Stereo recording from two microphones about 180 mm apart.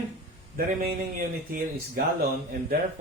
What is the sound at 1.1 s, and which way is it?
Speech, 50° right (ahead or behind).